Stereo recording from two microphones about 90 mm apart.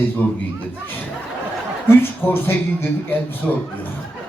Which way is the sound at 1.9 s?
25° left (ahead or behind).